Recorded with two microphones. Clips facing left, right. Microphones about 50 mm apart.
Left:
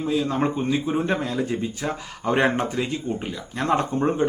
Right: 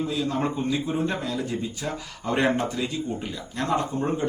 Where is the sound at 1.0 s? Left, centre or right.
Left.